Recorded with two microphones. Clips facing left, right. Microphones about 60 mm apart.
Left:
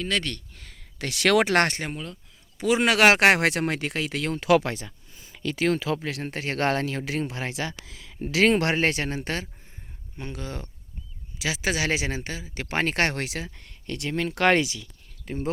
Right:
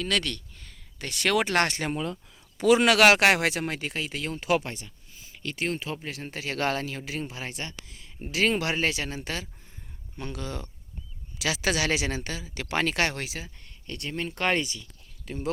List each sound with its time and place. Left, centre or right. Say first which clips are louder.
0.0 s speech: even; left
0.3 s speech: left 1 dB; left
1.5 s speech: left 3 dB; left
2.6 s a man's voice: right 3 dB; centre
2.8 s speech: left 2 dB; left
3.2 s speech: left 3 dB; left
5.7 s speech: left 6 dB; left
8.0 s speech: left 5 dB; left
8.4 s speech: left 4 dB; left
10.2 s speech: even; left
11.3 s speech: even; centre; by 14.8 s left
15.3 s speech: left 4 dB; left